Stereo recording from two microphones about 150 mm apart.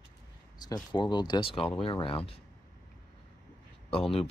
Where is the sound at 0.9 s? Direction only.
30° left (ahead or behind).